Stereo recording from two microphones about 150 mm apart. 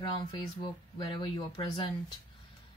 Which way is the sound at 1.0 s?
30° left (ahead or behind).